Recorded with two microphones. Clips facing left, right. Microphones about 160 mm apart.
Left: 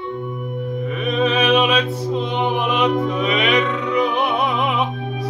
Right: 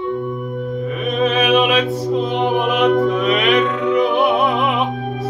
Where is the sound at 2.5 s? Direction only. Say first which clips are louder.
Right 3 dB; 45° right (ahead or behind).